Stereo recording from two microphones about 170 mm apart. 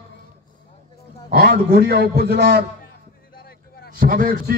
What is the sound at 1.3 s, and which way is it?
A man's voice, 60° right (ahead or behind).